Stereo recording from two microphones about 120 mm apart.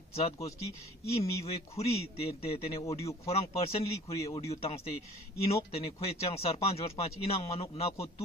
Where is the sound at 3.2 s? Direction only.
55° left (ahead or behind).